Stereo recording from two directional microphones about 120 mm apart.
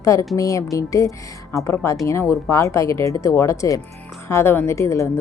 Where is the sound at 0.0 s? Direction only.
25° left (ahead or behind).